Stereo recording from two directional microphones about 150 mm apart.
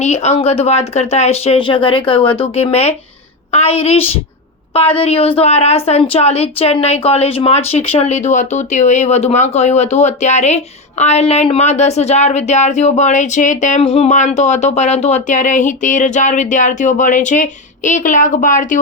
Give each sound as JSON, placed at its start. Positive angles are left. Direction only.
{"t": 0.0, "sound": "a woman's voice", "side_deg": 45}